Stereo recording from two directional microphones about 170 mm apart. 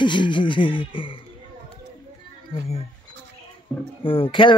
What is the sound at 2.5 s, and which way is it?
Speech, 40° left (ahead or behind).